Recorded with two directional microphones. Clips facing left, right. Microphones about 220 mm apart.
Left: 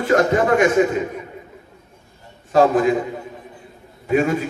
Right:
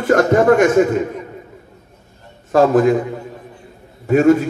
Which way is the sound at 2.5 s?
50° right (ahead or behind).